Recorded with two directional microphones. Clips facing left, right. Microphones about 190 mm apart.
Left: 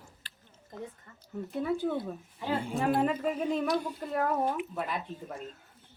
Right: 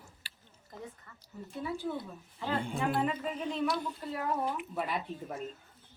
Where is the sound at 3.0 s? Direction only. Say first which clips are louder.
Left 4 dB; 45° left (ahead or behind).